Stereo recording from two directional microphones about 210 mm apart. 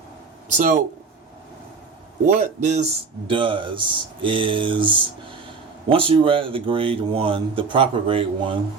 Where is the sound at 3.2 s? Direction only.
25° right (ahead or behind).